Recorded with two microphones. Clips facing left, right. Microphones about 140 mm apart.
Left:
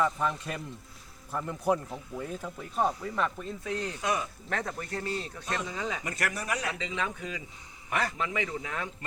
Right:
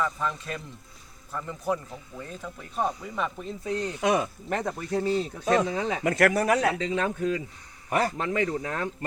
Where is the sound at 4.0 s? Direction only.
90° right.